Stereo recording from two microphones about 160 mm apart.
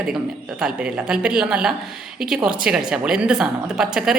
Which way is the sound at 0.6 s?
5° right (ahead or behind).